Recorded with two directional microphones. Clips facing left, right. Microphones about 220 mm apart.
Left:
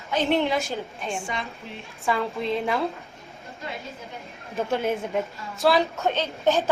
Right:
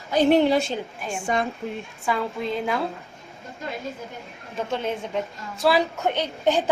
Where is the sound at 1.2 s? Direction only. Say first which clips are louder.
Right 8 dB; 55° right (ahead or behind).